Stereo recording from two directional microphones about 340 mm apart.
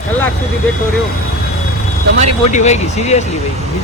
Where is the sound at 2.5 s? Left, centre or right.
Centre.